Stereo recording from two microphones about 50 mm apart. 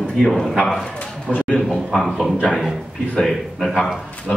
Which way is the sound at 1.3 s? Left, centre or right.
Left.